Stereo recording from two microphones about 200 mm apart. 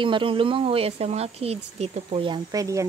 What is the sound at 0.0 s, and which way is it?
Speech, 25° right (ahead or behind).